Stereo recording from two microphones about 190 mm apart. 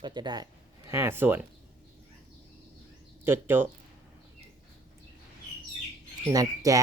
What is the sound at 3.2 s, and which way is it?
Speech, 10° right (ahead or behind).